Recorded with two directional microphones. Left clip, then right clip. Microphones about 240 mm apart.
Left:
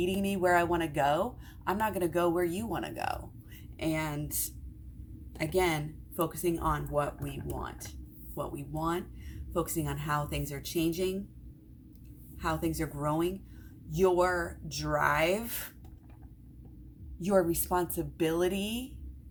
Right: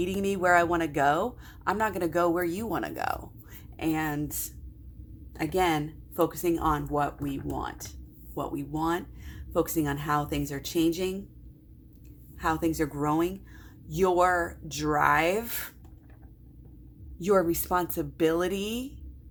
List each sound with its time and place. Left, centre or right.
0.0 s speech: right
5.4 s speech: right
12.4 s speech: right
17.2 s speech: right